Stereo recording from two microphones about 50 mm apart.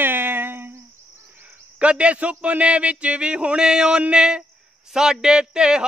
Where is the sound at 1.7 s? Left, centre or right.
Right.